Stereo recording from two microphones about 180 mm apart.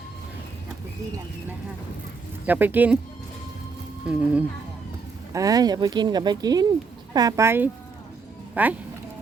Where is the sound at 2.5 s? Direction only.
10° right (ahead or behind).